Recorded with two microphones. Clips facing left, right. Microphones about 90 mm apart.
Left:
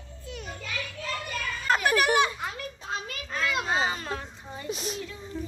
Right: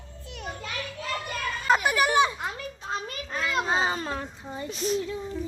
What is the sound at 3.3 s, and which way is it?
Children playing, 15° right (ahead or behind).